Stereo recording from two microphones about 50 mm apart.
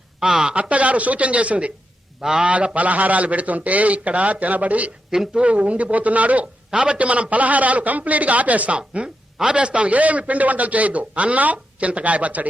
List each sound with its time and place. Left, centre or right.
0.2 s a man's voice: centre
5.1 s a woman's voice: centre
5.4 s a man's voice: right
6.7 s a man's voice: centre